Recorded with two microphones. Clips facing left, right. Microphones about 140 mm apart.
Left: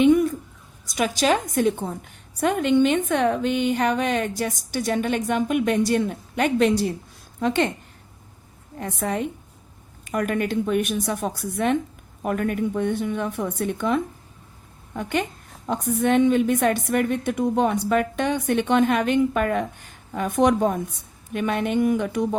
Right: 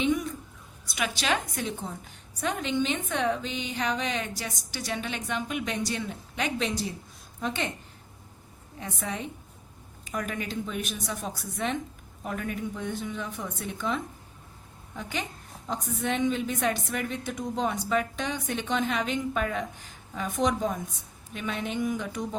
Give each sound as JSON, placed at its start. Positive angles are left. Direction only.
{"t": 0.0, "sound": "a sound", "side_deg": 55}
{"t": 0.9, "sound": "a woman's voice", "side_deg": 40}
{"t": 8.8, "sound": "a woman's voice", "side_deg": 55}